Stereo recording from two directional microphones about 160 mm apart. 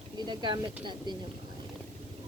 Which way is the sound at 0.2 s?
30° right (ahead or behind).